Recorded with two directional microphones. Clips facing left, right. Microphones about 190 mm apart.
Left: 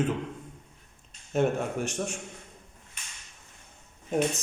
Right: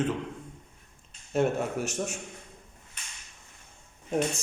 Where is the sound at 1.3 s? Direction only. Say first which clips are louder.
Even; centre (ahead or behind).